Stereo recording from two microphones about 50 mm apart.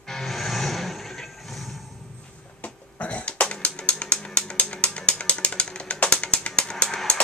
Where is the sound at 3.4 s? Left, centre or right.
Left.